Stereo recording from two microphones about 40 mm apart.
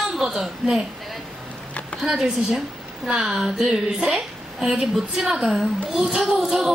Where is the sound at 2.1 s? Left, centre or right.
Centre.